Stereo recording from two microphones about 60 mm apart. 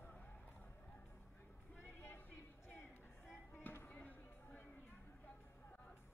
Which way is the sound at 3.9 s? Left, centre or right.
Left.